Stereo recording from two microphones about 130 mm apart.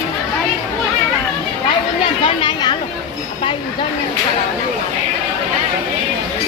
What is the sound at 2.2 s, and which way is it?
Speech, 35° left (ahead or behind).